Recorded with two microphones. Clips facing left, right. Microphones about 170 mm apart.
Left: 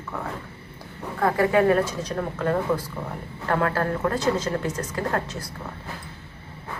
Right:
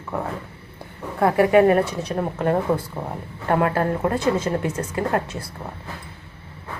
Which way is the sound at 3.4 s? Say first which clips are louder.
Right 3 dB; 20° right (ahead or behind).